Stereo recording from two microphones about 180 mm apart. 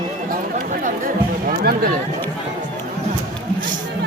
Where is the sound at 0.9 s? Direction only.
50° right (ahead or behind).